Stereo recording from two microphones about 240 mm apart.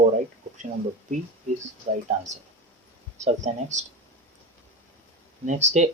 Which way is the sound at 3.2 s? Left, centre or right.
Right.